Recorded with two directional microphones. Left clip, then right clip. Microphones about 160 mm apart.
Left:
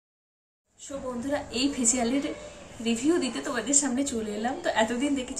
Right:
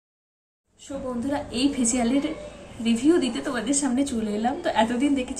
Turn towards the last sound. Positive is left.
turn(degrees=0)  # may be behind; listen again after turning